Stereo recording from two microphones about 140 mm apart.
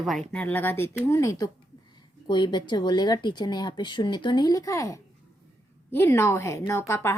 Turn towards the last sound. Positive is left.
turn(degrees=15)  # may be behind; listen again after turning